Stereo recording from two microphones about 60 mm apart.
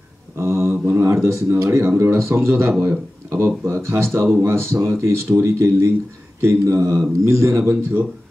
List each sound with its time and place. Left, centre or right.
0.4 s mantra: right
0.8 s speech: right